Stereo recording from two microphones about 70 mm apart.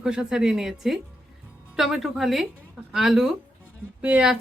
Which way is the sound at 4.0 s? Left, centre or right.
Centre.